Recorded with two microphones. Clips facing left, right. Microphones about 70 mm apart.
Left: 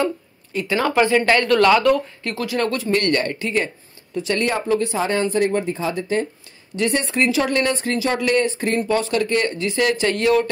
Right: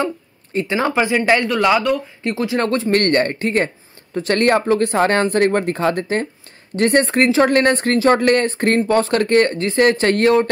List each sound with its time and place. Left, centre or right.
0.5 s speech: right
0.7 s speech: centre
2.2 s speech: right
2.9 s speech: right